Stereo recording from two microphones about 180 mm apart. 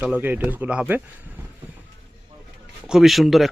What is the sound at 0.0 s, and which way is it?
Speech, 10° right (ahead or behind).